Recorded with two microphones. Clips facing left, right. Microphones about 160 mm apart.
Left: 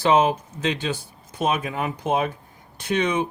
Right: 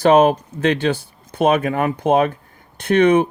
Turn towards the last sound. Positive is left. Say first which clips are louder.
# right 9 dB
turn(degrees=-55)  # may be behind; listen again after turning